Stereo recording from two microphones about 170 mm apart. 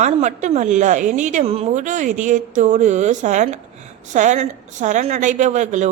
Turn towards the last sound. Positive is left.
turn(degrees=-45)  # may be behind; listen again after turning